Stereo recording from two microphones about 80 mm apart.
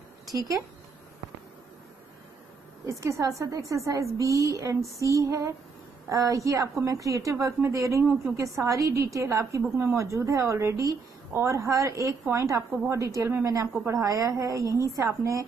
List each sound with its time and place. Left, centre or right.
0.3 s a woman's voice: right
2.9 s a woman's voice: right